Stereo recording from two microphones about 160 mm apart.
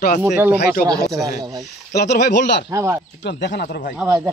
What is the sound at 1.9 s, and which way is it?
Speech, 90° left.